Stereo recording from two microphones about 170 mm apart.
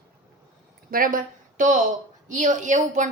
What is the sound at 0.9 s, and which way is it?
A woman's voice, 55° right (ahead or behind).